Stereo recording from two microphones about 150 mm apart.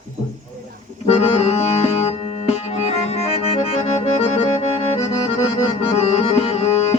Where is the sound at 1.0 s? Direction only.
40° left (ahead or behind).